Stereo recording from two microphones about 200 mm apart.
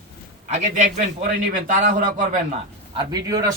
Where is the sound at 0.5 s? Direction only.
35° right (ahead or behind).